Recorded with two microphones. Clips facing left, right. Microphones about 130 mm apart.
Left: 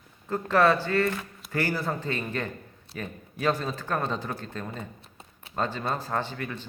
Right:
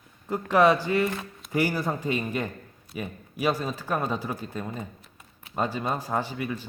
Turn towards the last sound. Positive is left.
turn(degrees=-10)  # may be behind; listen again after turning